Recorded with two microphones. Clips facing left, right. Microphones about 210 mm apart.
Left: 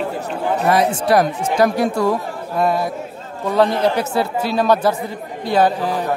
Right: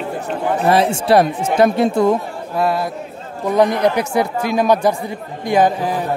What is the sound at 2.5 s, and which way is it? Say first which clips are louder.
Speech: even; centre (ahead or behind).